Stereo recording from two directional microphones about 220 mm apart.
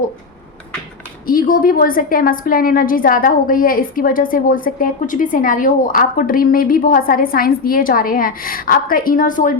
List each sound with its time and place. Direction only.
1.3 s a woman's voice: 40° left (ahead or behind)